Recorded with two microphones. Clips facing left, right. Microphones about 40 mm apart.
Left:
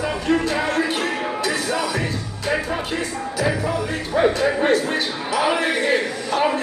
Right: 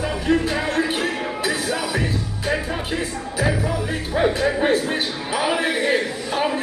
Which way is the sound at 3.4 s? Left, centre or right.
Centre.